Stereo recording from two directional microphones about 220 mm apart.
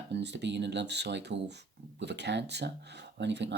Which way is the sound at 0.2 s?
55° right (ahead or behind).